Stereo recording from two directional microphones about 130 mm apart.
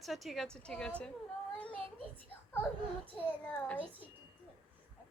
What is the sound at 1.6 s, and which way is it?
Child singing, 10° left (ahead or behind).